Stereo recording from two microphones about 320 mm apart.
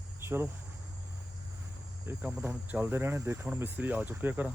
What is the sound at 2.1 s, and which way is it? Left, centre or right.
Speech, centre.